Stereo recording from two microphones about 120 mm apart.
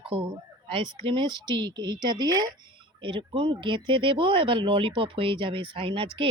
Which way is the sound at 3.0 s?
45° right (ahead or behind).